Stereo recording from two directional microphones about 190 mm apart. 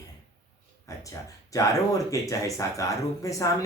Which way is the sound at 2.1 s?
15° left (ahead or behind).